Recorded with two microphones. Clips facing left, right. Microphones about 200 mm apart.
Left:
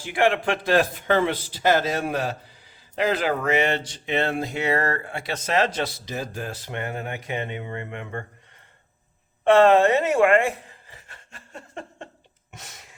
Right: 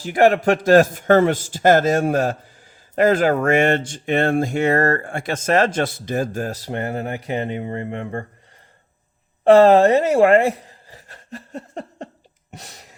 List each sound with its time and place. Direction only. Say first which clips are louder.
0.0 s a man's voice: right 6 dB; 40° right (ahead or behind)
9.4 s speech: right 5 dB; 35° right (ahead or behind)
12.5 s a sound: right 5 dB; 35° right (ahead or behind)